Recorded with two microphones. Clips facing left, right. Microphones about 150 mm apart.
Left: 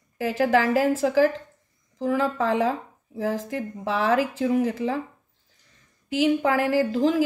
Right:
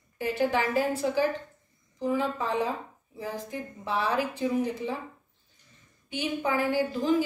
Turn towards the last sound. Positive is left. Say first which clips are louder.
# left 4 dB
turn(degrees=90)